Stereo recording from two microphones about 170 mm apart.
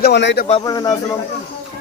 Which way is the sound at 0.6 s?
20° left (ahead or behind).